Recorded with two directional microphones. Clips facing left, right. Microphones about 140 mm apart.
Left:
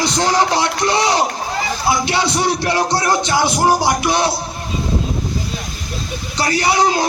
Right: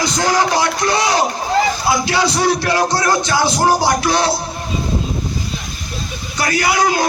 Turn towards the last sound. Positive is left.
turn(degrees=25)  # may be behind; listen again after turning